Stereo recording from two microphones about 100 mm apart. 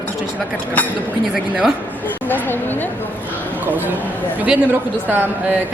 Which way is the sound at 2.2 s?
20° left (ahead or behind).